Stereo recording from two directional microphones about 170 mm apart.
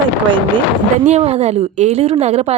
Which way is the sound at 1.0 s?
40° right (ahead or behind).